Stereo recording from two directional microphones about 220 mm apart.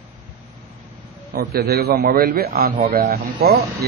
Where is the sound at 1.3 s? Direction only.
45° right (ahead or behind).